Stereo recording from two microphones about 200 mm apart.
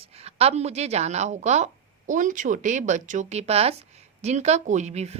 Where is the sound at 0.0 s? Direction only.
30° right (ahead or behind).